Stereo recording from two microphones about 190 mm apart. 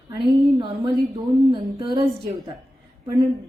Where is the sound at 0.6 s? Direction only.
20° right (ahead or behind).